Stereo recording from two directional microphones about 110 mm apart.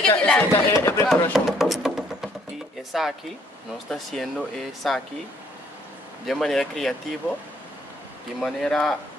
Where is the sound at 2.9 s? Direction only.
Centre (ahead or behind).